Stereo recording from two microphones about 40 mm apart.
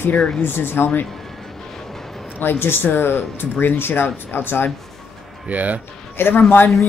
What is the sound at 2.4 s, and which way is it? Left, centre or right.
Speech, left.